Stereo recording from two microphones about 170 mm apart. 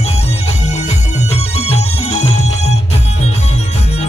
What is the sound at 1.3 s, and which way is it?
Music, 40° left (ahead or behind).